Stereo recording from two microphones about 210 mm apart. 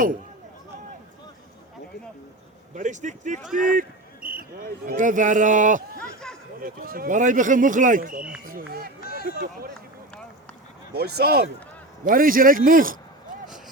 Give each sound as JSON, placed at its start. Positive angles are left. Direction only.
{"t": 2.7, "sound": "speech", "side_deg": -35}
{"t": 3.4, "sound": "speech", "side_deg": 0}
{"t": 3.8, "sound": "speech", "side_deg": -45}
{"t": 10.9, "sound": "speech", "side_deg": -50}